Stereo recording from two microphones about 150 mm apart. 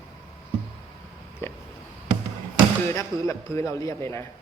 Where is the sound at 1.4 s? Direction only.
15° left (ahead or behind).